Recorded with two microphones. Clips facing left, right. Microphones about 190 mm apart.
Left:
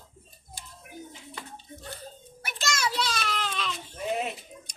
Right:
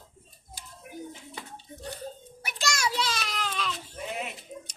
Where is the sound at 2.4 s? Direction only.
10° right (ahead or behind).